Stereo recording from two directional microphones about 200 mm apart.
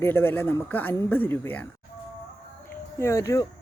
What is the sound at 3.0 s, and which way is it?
Speech, 15° left (ahead or behind).